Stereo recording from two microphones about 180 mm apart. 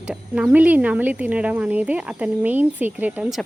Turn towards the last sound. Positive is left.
turn(degrees=-5)  # may be behind; listen again after turning